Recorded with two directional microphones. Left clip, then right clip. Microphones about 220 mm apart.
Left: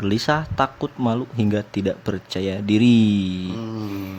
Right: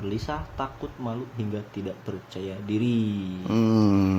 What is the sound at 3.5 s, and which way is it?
Mantra, 45° right (ahead or behind).